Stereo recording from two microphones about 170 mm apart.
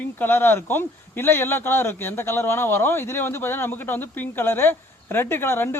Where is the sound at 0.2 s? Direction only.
15° left (ahead or behind).